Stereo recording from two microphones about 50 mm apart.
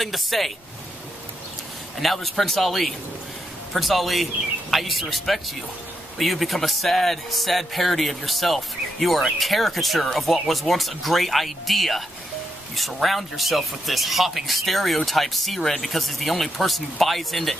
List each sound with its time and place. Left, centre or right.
0.0 s speech: centre
2.0 s speech: centre